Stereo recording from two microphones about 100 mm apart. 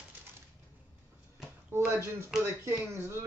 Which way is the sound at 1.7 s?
25° right (ahead or behind).